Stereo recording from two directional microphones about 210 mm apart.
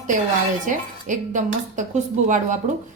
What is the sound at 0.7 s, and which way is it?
A woman's voice, 40° right (ahead or behind).